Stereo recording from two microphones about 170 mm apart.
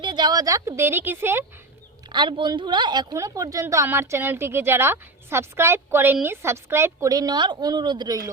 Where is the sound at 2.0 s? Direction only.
25° right (ahead or behind).